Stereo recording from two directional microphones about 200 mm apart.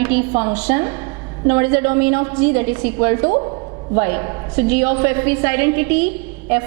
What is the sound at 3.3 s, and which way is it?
Speech, 30° right (ahead or behind).